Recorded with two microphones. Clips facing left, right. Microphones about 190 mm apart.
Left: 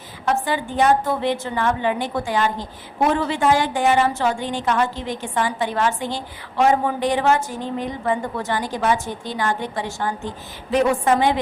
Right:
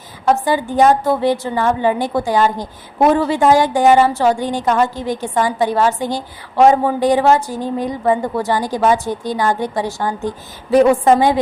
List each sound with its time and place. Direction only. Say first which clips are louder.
0.3 s a woman's voice: right 6 dB; 40° right (ahead or behind)